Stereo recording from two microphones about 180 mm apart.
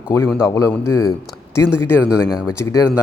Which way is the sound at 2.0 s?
5° right (ahead or behind).